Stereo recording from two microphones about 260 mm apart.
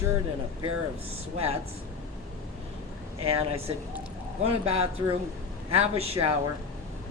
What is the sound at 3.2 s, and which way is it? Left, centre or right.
Speech, right.